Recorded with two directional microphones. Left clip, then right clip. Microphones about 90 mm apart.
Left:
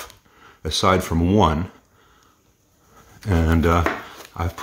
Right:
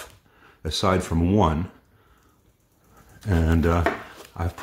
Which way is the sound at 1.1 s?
25° left (ahead or behind).